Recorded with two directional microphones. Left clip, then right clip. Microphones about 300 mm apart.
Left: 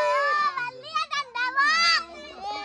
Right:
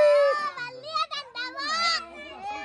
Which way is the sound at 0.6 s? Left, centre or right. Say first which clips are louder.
Left 1 dB; centre.